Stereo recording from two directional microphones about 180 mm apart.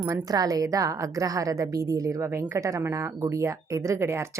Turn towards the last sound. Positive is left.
turn(degrees=-15)  # may be behind; listen again after turning